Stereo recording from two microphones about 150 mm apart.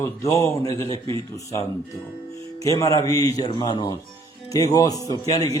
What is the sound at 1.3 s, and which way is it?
Speech, 20° left (ahead or behind).